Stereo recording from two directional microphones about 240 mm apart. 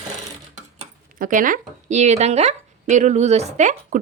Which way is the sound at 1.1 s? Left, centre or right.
Right.